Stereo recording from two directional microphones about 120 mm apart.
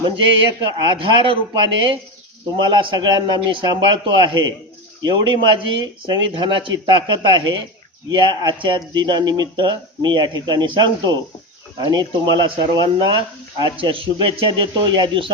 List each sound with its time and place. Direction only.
0.8 s speech: 45° right (ahead or behind)